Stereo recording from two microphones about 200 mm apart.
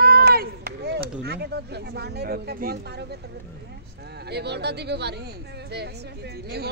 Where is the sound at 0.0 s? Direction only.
50° right (ahead or behind).